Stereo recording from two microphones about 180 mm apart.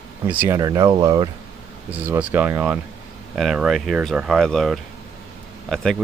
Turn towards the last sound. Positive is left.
turn(degrees=0)  # may be behind; listen again after turning